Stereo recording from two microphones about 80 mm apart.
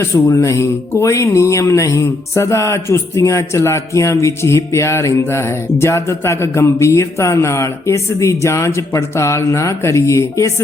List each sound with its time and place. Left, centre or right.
0.0 s speech: left